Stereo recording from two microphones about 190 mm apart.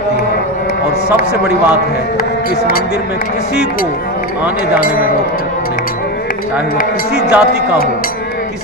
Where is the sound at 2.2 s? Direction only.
50° left (ahead or behind).